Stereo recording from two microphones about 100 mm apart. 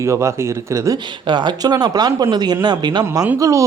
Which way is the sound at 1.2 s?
50° right (ahead or behind).